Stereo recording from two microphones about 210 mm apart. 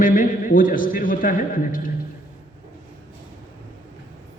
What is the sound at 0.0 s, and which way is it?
A man's voice, 40° left (ahead or behind).